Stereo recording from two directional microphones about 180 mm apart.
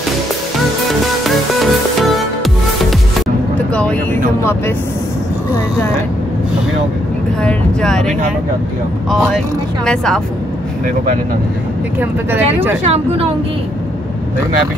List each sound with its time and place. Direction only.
1.2 s music: centre (ahead or behind)
3.7 s speech: 5° left (ahead or behind)
7.4 s speech: 5° left (ahead or behind)
9.8 s speech: 5° left (ahead or behind)
12.0 s speech: 10° right (ahead or behind)
12.8 s speech: 35° right (ahead or behind)